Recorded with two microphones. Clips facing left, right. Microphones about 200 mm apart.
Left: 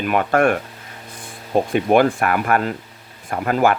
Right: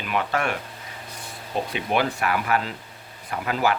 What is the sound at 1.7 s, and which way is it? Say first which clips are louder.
Speech: left 10 dB; 50° left (ahead or behind).